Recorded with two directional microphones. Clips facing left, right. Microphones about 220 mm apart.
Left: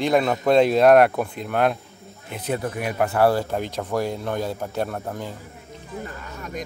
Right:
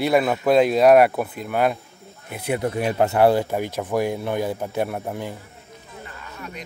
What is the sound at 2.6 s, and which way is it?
Speech, 25° right (ahead or behind).